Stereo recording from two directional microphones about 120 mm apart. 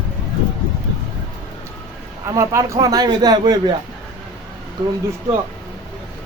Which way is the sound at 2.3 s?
25° right (ahead or behind).